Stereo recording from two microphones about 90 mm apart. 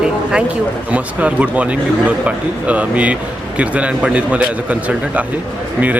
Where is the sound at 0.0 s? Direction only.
10° right (ahead or behind).